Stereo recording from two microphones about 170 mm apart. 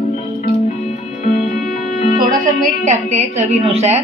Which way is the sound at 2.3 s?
45° right (ahead or behind).